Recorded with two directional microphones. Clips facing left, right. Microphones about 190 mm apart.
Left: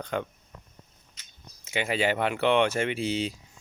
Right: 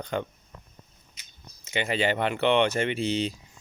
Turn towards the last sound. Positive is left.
turn(degrees=5)  # may be behind; listen again after turning